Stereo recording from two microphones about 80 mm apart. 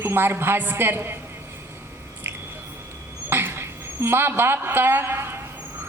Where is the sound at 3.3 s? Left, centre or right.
Right.